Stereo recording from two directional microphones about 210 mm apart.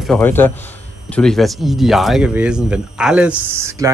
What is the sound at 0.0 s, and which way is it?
A man's voice, 5° left (ahead or behind).